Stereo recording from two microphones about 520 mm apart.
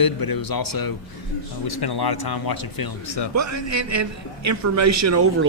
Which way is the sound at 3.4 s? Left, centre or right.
Right.